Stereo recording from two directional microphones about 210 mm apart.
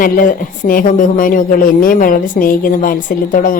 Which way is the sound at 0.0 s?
40° left (ahead or behind).